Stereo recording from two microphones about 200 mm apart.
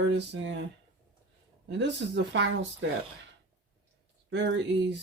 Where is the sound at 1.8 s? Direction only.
60° right (ahead or behind).